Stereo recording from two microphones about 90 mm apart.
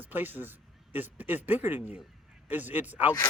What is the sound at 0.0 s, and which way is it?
A man's voice, 20° right (ahead or behind).